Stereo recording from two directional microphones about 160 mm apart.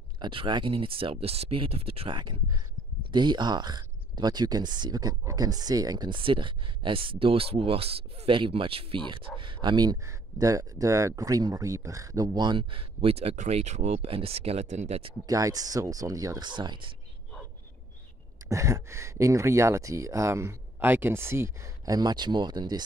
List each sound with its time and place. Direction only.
0.2 s speech: 30° right (ahead or behind)
15.2 s speech: 20° right (ahead or behind)
18.5 s speech: 20° right (ahead or behind)